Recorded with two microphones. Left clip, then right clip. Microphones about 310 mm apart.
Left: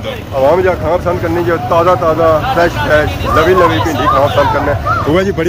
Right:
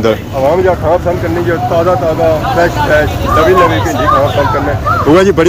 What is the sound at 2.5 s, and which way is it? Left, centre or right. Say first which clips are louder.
Speech: right 1 dB; centre.